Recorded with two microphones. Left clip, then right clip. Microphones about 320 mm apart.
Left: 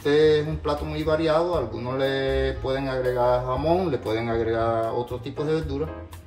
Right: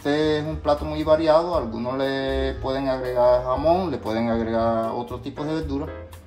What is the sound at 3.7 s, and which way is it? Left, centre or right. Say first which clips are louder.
Speech: right 1 dB; right.